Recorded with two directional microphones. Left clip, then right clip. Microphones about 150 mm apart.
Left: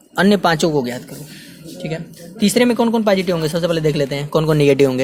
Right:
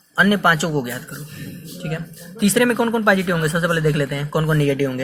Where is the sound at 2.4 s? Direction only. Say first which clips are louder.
Left 2 dB; 20° left (ahead or behind).